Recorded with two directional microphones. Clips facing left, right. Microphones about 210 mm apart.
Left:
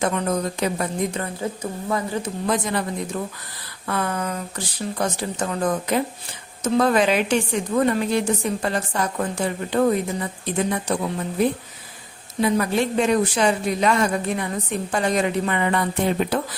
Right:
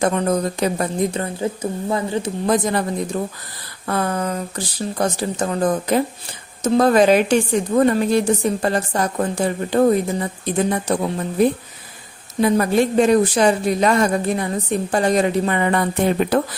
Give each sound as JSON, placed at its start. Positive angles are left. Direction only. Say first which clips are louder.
{"t": 0.0, "sound": "speech", "louder": "right 4 dB", "side_deg": -35}
{"t": 2.5, "sound": "speech", "louder": "right 5 dB", "side_deg": -40}
{"t": 12.4, "sound": "speech", "louder": "right 4 dB", "side_deg": -45}